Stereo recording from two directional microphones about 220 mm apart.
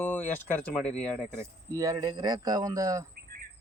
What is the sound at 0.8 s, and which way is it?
Speech, 5° left (ahead or behind).